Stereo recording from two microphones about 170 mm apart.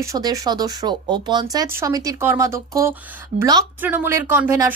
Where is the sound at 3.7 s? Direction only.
10° right (ahead or behind).